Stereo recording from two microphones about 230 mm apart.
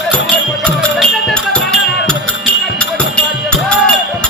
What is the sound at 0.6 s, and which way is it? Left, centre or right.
Music, centre.